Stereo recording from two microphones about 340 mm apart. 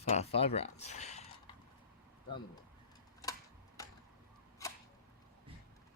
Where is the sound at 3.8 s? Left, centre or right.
Centre.